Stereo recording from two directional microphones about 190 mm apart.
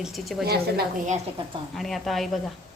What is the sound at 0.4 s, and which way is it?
Speech, 55° right (ahead or behind).